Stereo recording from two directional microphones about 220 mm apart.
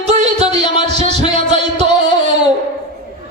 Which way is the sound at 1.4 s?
30° right (ahead or behind).